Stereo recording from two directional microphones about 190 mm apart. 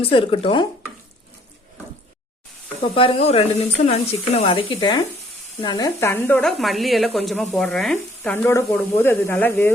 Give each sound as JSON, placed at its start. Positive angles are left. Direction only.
{"t": 0.0, "sound": "speech", "side_deg": 30}
{"t": 2.8, "sound": "speech", "side_deg": 30}